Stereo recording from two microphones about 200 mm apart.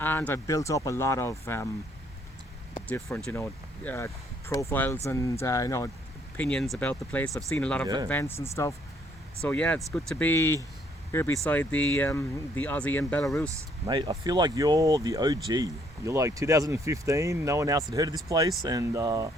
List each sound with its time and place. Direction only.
0.0 s speech: 10° left (ahead or behind)
3.1 s speech: 5° left (ahead or behind)
13.5 s speech: 15° right (ahead or behind)